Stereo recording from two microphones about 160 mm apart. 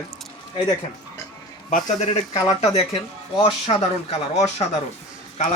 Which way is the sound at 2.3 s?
20° left (ahead or behind).